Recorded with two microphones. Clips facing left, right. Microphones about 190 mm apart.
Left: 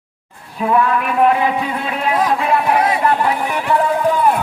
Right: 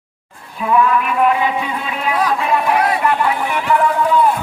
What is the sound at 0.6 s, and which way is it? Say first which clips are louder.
Speech: even; 35° left (ahead or behind).